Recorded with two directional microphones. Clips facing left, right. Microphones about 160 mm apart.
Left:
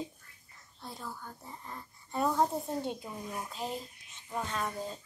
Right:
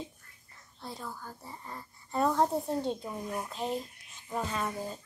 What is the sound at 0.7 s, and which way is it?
Speech, centre (ahead or behind).